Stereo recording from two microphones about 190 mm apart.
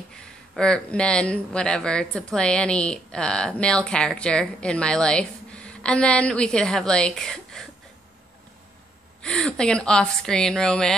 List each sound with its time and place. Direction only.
0.1 s speech: 5° left (ahead or behind)
9.2 s speech: 5° left (ahead or behind)